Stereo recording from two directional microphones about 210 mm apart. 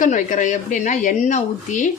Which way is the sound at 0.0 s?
35° left (ahead or behind).